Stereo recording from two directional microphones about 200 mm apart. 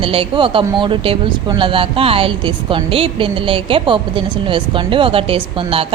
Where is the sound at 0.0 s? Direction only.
25° right (ahead or behind).